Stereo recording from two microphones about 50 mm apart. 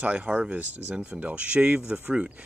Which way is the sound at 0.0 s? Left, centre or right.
Right.